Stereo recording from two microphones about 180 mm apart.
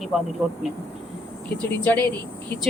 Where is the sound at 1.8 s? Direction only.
10° left (ahead or behind).